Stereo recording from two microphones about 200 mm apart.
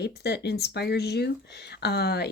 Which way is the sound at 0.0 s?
55° left (ahead or behind).